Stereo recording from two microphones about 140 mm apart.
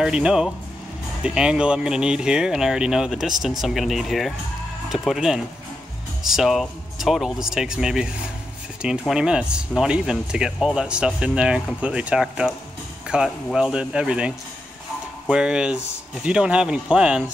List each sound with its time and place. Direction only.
0.0 s speech: 5° right (ahead or behind)